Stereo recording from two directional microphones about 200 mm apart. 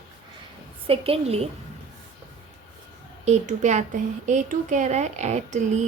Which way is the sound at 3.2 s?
35° right (ahead or behind).